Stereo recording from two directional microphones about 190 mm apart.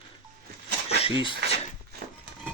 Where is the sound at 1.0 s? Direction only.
25° left (ahead or behind).